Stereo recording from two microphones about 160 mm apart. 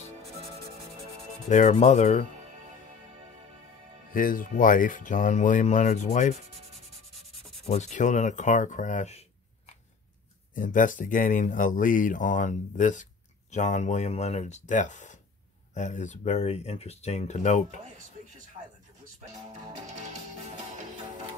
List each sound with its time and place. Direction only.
1.5 s speech: 50° left (ahead or behind)
4.1 s speech: 60° left (ahead or behind)
7.6 s speech: 45° left (ahead or behind)
10.5 s speech: 55° left (ahead or behind)
18.6 s a sound: 35° right (ahead or behind)